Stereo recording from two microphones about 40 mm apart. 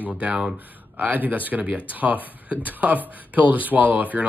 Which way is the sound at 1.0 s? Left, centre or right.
Right.